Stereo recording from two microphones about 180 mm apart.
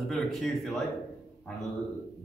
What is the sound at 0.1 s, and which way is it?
Speech, centre (ahead or behind).